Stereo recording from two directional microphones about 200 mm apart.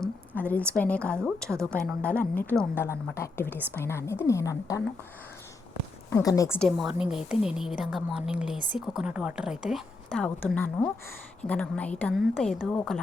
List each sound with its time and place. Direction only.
0.0 s a woman's voice: 5° left (ahead or behind)
6.1 s a woman's voice: 15° left (ahead or behind)
6.6 s a woman's voice: centre (ahead or behind)